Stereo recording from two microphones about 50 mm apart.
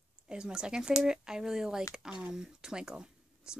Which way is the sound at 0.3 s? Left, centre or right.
Centre.